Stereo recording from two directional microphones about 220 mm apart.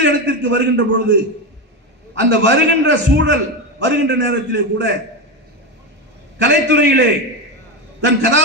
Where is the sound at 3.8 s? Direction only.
50° right (ahead or behind).